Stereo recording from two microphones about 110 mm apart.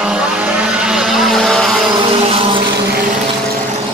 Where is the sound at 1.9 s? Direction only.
55° right (ahead or behind).